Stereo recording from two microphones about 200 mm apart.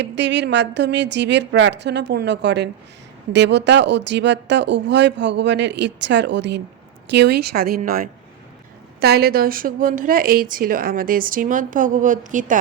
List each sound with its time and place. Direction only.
0.0 s speech: 60° right (ahead or behind); by 12.5 s 40° right (ahead or behind)